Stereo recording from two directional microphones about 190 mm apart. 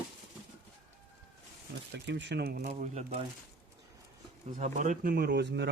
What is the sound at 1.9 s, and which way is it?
Speech, 65° right (ahead or behind).